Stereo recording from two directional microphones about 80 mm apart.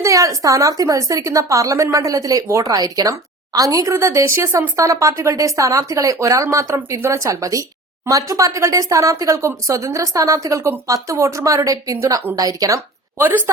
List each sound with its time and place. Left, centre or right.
0.0 s a woman's voice: right
13.1 s a woman's voice: right